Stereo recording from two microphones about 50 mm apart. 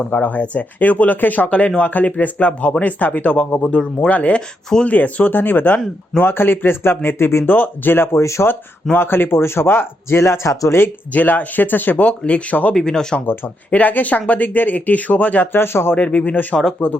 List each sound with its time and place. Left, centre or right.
0.1 s speech: left
3.2 s speech: left
6.2 s speech: left
8.2 s speech: left
9.0 s speech: left
11.1 s speech: left
12.0 s speech: left
12.7 s speech: centre
13.2 s speech: left
13.7 s speech: left
15.5 s speech: left
16.0 s speech: left